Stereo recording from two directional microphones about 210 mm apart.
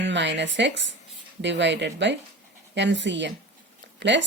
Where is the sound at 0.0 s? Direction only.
60° right (ahead or behind).